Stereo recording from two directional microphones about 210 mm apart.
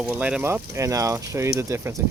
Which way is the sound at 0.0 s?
5° right (ahead or behind).